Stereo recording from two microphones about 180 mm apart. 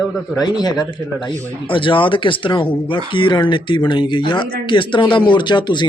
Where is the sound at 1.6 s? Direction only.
30° left (ahead or behind).